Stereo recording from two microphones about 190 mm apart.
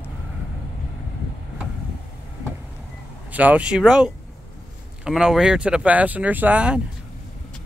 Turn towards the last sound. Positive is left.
turn(degrees=-5)  # may be behind; listen again after turning